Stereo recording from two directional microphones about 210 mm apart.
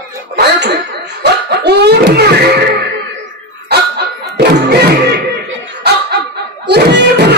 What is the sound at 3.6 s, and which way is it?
Music, 50° right (ahead or behind).